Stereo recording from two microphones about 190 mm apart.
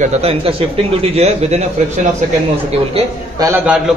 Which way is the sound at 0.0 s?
30° right (ahead or behind).